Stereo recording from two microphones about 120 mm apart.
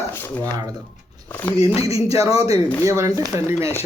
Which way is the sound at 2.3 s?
55° left (ahead or behind).